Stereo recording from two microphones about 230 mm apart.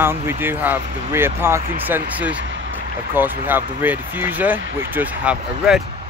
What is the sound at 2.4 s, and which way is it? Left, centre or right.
Vehicle, right.